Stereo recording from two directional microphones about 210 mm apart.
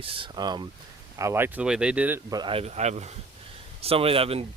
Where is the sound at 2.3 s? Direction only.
20° right (ahead or behind).